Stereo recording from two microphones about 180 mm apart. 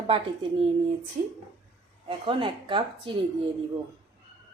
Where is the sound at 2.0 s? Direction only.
30° right (ahead or behind).